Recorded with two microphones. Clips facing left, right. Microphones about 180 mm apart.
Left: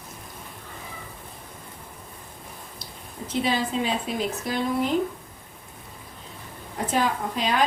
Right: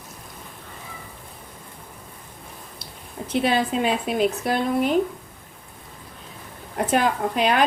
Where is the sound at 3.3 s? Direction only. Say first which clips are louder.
Right 4 dB; 65° right (ahead or behind).